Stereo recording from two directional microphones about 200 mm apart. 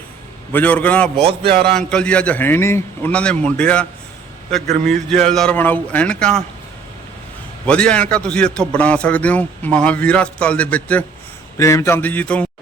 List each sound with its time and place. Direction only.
0.5 s a man's voice: 5° left (ahead or behind)
1.2 s speech: 25° right (ahead or behind)
1.7 s a man's voice: 5° left (ahead or behind)
5.0 s a man's voice: 5° left (ahead or behind)
7.7 s a man's voice: 5° left (ahead or behind)